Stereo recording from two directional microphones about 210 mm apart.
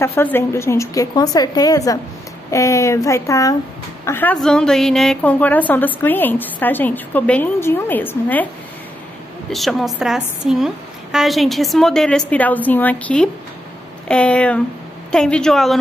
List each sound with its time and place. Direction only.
0.0 s a woman's voice: 10° left (ahead or behind)
9.5 s a woman's voice: centre (ahead or behind)